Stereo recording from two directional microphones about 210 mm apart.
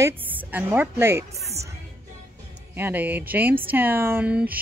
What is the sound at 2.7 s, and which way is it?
Speech, 10° right (ahead or behind).